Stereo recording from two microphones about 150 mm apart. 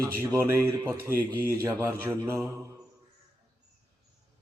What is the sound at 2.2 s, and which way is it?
Mantra, 15° right (ahead or behind).